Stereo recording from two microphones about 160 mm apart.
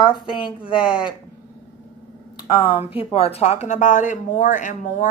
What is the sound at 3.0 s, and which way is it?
A woman's voice, 40° left (ahead or behind).